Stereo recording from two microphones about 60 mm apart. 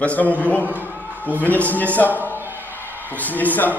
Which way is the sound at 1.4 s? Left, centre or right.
Left.